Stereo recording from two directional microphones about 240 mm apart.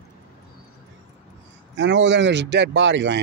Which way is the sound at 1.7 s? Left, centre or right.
Right.